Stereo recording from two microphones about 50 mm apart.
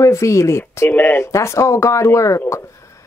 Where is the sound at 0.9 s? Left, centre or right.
Left.